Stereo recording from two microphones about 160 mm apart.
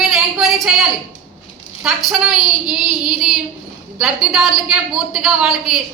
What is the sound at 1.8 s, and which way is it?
Speech, centre (ahead or behind).